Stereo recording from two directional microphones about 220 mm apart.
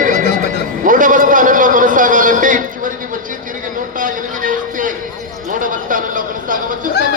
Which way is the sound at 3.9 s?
35° right (ahead or behind).